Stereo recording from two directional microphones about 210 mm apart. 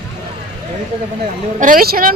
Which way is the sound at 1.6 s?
40° right (ahead or behind).